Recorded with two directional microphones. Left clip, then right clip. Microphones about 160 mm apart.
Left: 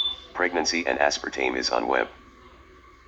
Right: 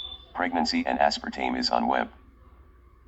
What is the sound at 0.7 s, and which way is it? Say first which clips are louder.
Speech: left 1 dB; 90° right.